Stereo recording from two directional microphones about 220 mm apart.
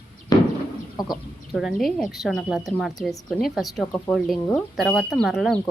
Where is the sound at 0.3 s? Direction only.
15° left (ahead or behind).